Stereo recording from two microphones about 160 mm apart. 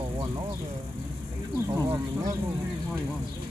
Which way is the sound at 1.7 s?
15° right (ahead or behind).